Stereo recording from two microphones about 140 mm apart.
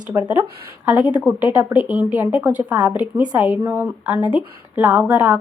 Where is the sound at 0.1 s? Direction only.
20° right (ahead or behind).